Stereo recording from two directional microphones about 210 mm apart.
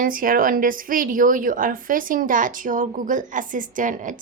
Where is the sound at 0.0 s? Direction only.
40° right (ahead or behind).